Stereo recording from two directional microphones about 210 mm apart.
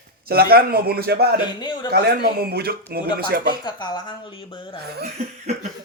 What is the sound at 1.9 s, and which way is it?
Speech, 50° right (ahead or behind).